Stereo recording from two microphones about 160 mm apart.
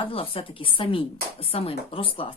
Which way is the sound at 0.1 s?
35° left (ahead or behind).